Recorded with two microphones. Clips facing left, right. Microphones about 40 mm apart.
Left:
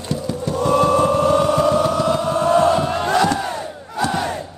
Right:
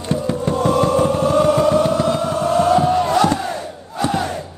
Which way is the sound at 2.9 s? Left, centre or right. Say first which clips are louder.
Right 3 dB; left.